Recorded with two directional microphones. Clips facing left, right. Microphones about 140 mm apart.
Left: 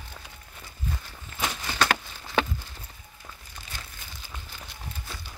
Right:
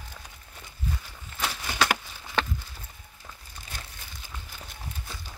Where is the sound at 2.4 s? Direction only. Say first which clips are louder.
Left 3 dB; 5° left (ahead or behind).